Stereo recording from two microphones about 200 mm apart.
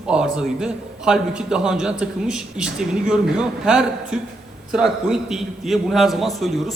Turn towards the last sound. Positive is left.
turn(degrees=0)  # may be behind; listen again after turning